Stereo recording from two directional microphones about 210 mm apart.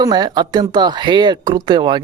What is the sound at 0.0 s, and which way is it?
Speech, 20° right (ahead or behind).